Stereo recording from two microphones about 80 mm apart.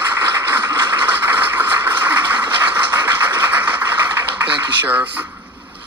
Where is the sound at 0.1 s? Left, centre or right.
Right.